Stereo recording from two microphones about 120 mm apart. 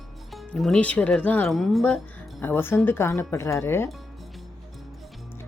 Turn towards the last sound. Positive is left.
turn(degrees=20)  # may be behind; listen again after turning